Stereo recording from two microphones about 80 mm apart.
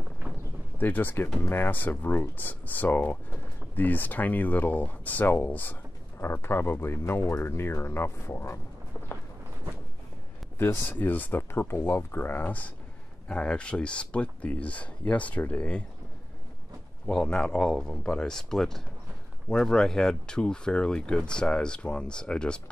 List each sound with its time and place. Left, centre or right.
0.7 s speech: left
10.6 s speech: left
17.0 s speech: centre